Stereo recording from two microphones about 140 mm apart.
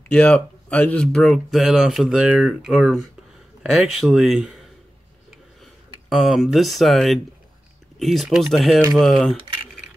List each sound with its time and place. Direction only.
0.1 s speech: 10° left (ahead or behind)
6.0 s speech: centre (ahead or behind)